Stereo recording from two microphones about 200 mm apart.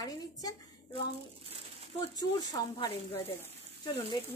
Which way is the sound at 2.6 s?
20° left (ahead or behind).